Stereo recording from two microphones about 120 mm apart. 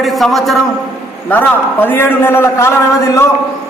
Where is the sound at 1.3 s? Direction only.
15° left (ahead or behind).